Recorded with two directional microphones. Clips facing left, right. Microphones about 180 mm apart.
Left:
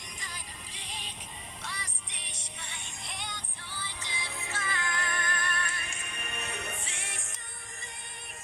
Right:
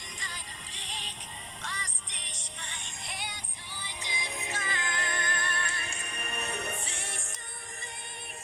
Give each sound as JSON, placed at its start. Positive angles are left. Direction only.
{"t": 0.2, "sound": "music", "side_deg": 5}